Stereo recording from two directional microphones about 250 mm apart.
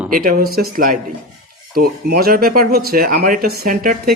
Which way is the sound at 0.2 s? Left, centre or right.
Right.